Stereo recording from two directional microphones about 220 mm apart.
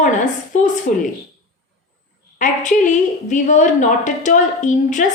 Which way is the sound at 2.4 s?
35° left (ahead or behind).